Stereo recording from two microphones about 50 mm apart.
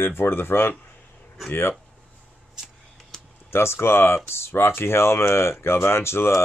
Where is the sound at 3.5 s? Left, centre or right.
Left.